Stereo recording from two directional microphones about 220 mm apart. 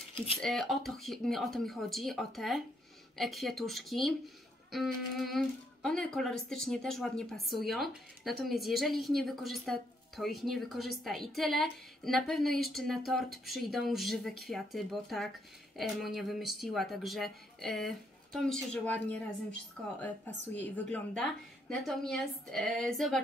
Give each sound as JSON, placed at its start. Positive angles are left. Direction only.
{"t": 0.1, "sound": "speech", "side_deg": 25}
{"t": 0.4, "sound": "speech", "side_deg": 0}
{"t": 20.5, "sound": "speech", "side_deg": 5}